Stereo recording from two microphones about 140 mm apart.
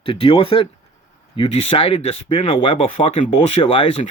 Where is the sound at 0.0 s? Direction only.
40° left (ahead or behind).